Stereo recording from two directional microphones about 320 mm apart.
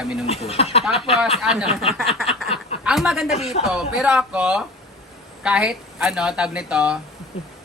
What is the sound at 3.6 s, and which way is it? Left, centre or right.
Speech, centre.